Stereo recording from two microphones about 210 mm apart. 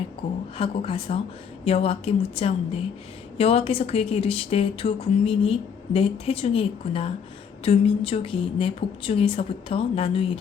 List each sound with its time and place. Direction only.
0.5 s speech: 25° left (ahead or behind)